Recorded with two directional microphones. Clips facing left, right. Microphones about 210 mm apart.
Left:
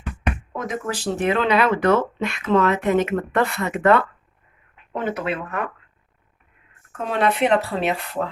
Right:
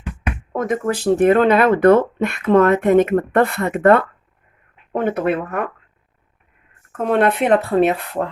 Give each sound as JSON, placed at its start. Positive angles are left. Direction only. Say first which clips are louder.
{"t": 0.5, "sound": "speech", "louder": "right 12 dB", "side_deg": -55}
{"t": 6.9, "sound": "speech", "louder": "right 5 dB", "side_deg": -55}